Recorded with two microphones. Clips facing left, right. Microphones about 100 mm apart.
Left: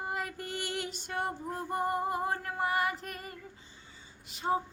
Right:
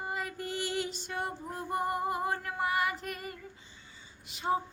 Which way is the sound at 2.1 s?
30° left (ahead or behind).